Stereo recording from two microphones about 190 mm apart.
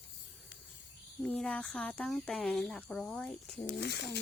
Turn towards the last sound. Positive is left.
turn(degrees=65)  # may be behind; listen again after turning